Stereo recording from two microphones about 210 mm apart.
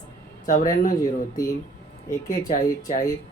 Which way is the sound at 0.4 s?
40° left (ahead or behind).